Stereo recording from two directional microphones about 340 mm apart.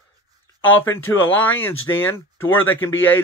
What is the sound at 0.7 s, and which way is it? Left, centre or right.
Speech, centre.